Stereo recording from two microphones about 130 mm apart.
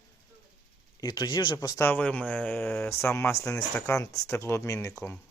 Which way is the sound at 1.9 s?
10° left (ahead or behind).